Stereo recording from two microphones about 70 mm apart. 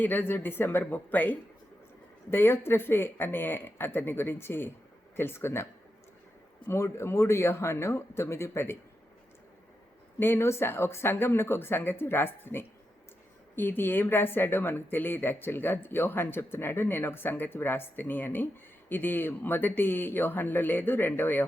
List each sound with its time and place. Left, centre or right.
0.0 s speech: left
2.3 s speech: left
6.7 s speech: left
10.2 s speech: left